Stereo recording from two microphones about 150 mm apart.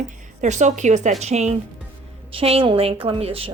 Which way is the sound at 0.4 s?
50° right (ahead or behind).